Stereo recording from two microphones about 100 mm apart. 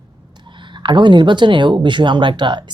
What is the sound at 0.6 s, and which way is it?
Speech, 50° right (ahead or behind).